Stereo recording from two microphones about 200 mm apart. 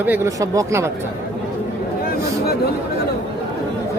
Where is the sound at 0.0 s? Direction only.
10° right (ahead or behind).